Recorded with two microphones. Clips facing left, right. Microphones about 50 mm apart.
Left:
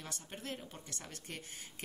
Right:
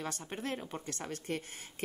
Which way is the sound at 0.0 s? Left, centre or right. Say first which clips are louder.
Right 7 dB; right.